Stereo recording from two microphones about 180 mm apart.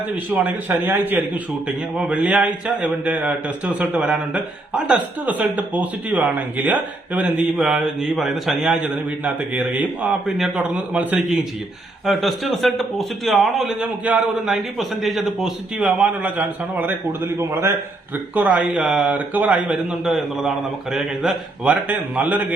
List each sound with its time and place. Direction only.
0.3 s a man's voice: 10° right (ahead or behind)